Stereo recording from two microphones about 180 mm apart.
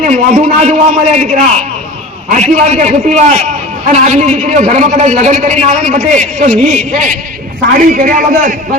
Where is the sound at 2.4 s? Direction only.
40° right (ahead or behind).